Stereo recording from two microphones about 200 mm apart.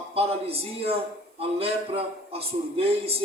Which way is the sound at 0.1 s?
30° right (ahead or behind).